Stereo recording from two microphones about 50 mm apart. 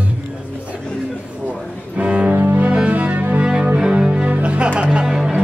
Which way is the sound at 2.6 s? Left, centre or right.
Right.